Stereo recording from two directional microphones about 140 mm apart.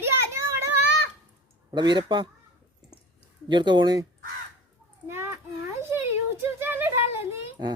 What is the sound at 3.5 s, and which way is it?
Speech, 35° right (ahead or behind).